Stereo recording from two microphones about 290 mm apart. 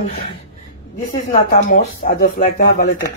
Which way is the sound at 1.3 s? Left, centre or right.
Left.